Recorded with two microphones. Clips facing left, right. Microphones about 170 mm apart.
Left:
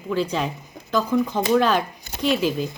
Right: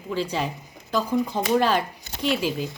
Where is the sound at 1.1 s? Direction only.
15° right (ahead or behind).